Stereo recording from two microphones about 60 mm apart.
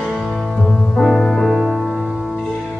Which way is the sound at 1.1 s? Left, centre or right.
Centre.